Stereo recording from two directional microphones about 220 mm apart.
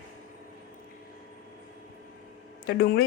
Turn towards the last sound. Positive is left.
turn(degrees=45)  # may be behind; listen again after turning